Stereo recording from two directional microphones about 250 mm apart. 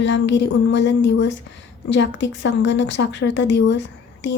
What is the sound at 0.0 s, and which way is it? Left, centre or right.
Speech, left.